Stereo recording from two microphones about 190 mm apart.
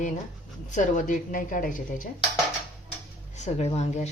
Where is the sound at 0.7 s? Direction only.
40° left (ahead or behind).